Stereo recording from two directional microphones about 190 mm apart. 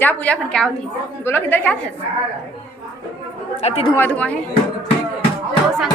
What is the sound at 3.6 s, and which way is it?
Speech, 30° left (ahead or behind).